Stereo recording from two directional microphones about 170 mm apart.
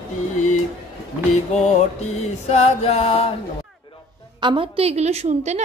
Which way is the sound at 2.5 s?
35° left (ahead or behind).